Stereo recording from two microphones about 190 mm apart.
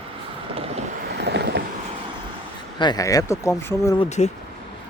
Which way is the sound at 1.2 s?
65° right (ahead or behind).